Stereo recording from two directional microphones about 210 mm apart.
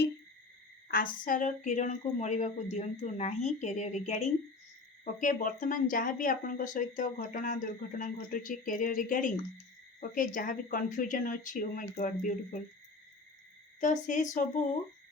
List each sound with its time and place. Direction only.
0.9 s speech: 45° left (ahead or behind)
13.7 s speech: 35° left (ahead or behind)